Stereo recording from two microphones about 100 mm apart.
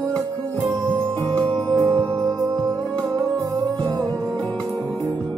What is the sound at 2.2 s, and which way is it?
Music, 35° right (ahead or behind).